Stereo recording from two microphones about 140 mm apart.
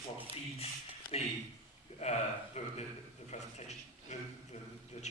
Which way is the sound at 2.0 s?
55° left (ahead or behind).